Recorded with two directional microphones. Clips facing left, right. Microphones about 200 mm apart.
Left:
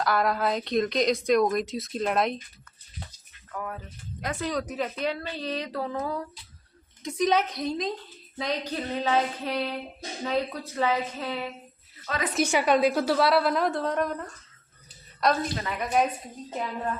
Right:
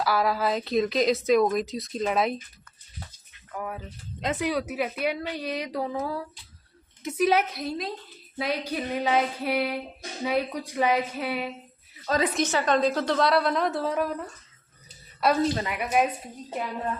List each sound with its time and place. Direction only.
0.0 s a woman's voice: 5° right (ahead or behind)
3.5 s a sound: 10° right (ahead or behind)
4.2 s speech: 20° right (ahead or behind)
4.4 s a woman's voice: 10° right (ahead or behind)
12.0 s a woman's voice: 35° right (ahead or behind)
12.3 s a woman's voice: 10° left (ahead or behind); by 16.0 s 10° right (ahead or behind)